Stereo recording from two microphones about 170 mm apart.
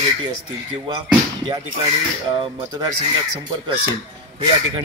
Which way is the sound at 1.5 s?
30° right (ahead or behind).